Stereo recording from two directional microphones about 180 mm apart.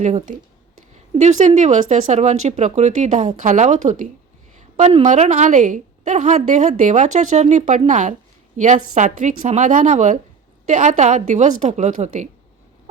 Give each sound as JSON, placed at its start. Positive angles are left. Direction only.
{"t": 0.0, "sound": "a woman's voice", "side_deg": -45}